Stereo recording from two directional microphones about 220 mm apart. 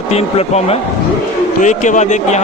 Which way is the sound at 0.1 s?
30° left (ahead or behind).